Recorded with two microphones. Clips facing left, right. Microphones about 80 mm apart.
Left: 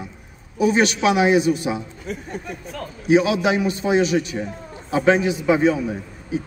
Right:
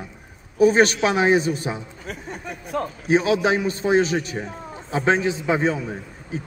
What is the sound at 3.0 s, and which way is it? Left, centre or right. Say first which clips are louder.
A man's voice: left 2 dB; right.